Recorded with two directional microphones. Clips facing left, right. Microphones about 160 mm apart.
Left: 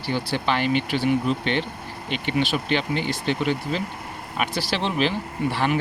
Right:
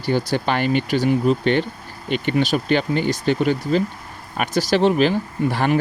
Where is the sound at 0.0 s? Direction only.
45° right (ahead or behind).